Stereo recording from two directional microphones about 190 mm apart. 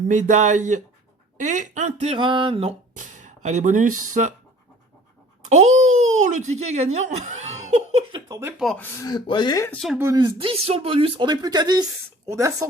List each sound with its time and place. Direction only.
0.1 s speech: 40° right (ahead or behind)
5.5 s speech: 35° right (ahead or behind)
8.3 s speech: 15° right (ahead or behind)
8.5 s speech: centre (ahead or behind)
9.0 s speech: 20° left (ahead or behind)
9.7 s speech: centre (ahead or behind)
10.0 s speech: 20° right (ahead or behind)